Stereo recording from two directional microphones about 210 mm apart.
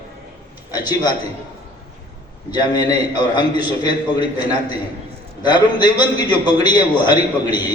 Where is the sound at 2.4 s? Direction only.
20° left (ahead or behind).